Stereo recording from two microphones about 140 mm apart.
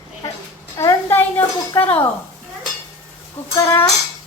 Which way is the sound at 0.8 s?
20° left (ahead or behind).